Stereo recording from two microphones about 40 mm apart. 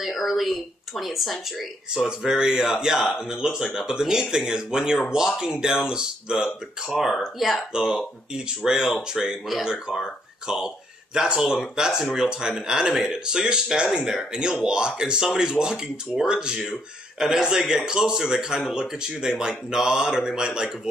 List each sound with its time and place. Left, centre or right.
0.0 s speech: centre
2.0 s a man's voice: centre
7.2 s speech: centre
8.6 s speech: centre
11.1 s a man's voice: centre